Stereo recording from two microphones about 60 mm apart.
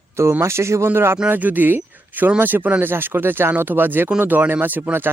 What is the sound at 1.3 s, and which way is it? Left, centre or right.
Speech, right.